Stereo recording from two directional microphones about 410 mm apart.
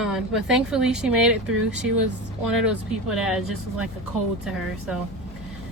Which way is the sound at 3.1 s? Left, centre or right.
Centre.